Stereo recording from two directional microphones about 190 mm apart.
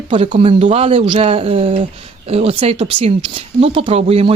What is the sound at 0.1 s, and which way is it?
Speech, 30° right (ahead or behind).